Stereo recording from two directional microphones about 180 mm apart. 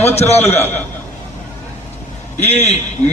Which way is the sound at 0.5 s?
10° left (ahead or behind).